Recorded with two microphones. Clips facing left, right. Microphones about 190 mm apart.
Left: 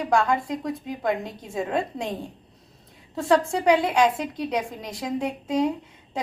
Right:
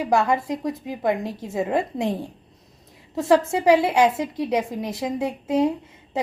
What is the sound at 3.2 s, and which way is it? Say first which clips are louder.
A woman's voice: right 3 dB; 20° right (ahead or behind).